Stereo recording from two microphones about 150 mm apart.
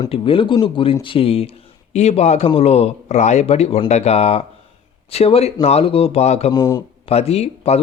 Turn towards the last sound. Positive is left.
turn(degrees=45)  # may be behind; listen again after turning